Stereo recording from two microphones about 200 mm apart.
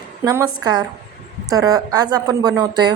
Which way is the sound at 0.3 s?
15° right (ahead or behind).